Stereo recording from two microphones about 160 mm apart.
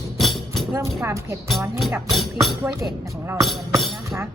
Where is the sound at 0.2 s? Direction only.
Centre (ahead or behind).